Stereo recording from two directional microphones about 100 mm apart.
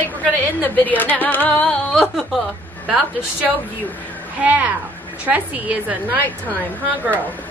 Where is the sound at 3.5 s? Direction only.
15° left (ahead or behind).